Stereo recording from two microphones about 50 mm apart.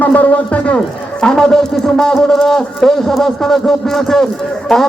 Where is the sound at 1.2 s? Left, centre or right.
Centre.